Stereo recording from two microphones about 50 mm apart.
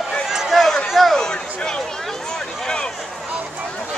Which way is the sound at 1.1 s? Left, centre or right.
Centre.